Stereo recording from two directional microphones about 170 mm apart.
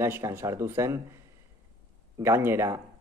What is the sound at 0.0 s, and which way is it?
Speech, 15° right (ahead or behind).